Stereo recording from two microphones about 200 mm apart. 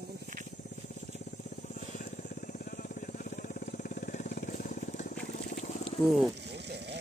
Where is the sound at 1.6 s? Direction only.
40° left (ahead or behind).